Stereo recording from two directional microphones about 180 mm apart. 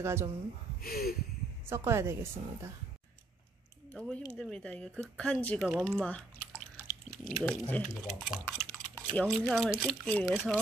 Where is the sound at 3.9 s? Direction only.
5° left (ahead or behind).